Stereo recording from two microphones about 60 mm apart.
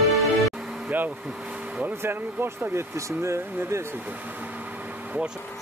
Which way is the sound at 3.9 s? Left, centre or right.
Right.